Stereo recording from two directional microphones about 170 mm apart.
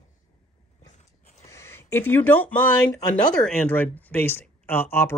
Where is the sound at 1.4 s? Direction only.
15° left (ahead or behind).